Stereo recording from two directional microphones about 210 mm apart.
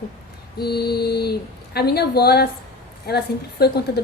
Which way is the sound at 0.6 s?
50° left (ahead or behind).